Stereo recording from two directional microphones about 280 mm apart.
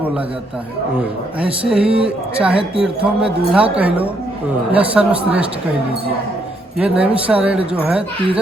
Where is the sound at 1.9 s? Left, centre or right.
Centre.